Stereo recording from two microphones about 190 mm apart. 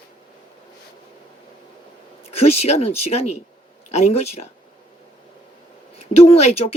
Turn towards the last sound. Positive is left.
turn(degrees=35)  # may be behind; listen again after turning